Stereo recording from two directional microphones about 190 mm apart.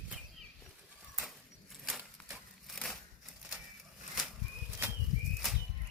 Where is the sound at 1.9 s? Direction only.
5° right (ahead or behind).